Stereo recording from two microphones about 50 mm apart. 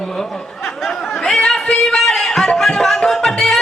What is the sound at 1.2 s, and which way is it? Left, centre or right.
Music, centre.